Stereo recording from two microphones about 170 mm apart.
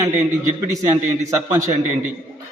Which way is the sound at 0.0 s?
10° right (ahead or behind).